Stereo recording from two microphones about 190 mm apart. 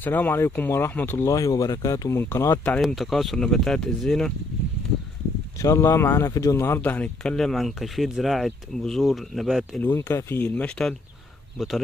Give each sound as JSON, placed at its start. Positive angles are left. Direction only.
{"t": 0.0, "sound": "speech", "side_deg": 10}
{"t": 2.8, "sound": "speech", "side_deg": 0}
{"t": 5.6, "sound": "speech", "side_deg": 15}
{"t": 9.8, "sound": "speech", "side_deg": 10}